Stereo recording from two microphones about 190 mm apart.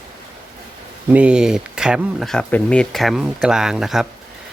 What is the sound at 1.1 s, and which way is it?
Speech, 5° right (ahead or behind).